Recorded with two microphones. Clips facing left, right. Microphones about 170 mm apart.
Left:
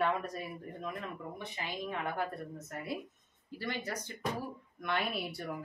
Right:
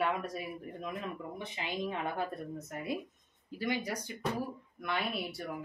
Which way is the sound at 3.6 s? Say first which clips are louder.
Right 4 dB; 10° right (ahead or behind).